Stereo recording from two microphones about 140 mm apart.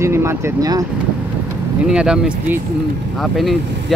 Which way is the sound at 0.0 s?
20° right (ahead or behind).